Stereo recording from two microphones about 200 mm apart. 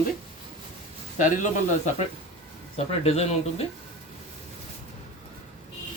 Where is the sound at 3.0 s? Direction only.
30° left (ahead or behind).